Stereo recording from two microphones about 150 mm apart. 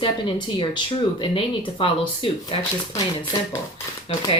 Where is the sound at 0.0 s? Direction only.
30° left (ahead or behind).